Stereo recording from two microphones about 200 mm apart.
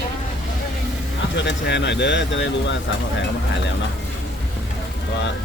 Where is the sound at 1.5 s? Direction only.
60° left (ahead or behind).